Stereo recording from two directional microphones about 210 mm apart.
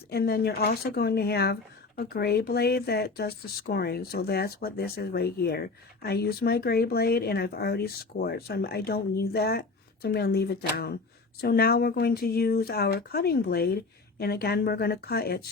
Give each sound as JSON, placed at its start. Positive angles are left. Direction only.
{"t": 0.1, "sound": "speech", "side_deg": 50}